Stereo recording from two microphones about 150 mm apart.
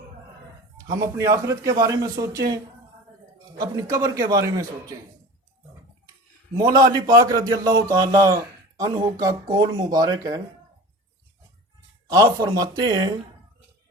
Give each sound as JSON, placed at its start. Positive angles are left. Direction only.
{"t": 0.9, "sound": "a man's voice", "side_deg": -20}
{"t": 3.7, "sound": "a man's voice", "side_deg": -20}
{"t": 6.6, "sound": "a man's voice", "side_deg": -25}
{"t": 12.1, "sound": "a man's voice", "side_deg": -25}